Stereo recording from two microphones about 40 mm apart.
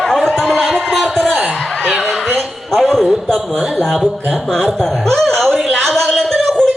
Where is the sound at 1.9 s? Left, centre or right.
Centre.